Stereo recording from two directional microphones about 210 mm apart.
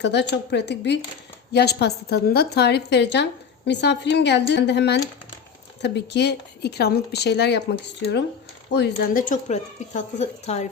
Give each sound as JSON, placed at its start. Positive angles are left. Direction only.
{"t": 0.0, "sound": "speech", "side_deg": 55}
{"t": 9.0, "sound": "speech", "side_deg": 40}